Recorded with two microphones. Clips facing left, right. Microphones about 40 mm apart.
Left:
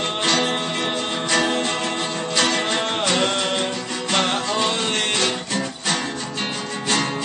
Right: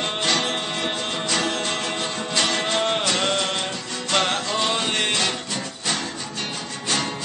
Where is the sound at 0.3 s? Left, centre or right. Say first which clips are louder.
Left 4 dB; centre.